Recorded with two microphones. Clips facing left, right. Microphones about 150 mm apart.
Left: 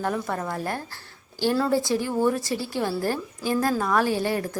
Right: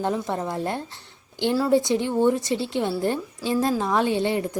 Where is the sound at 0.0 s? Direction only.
20° right (ahead or behind).